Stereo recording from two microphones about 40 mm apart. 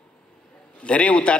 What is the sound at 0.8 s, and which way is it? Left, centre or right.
Speech, left.